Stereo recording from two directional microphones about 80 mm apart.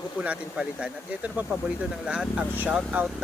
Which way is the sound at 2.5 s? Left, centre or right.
Right.